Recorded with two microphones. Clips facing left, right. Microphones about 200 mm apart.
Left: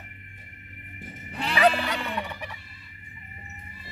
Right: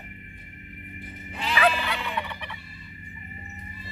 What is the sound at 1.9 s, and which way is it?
Fowl, 45° left (ahead or behind).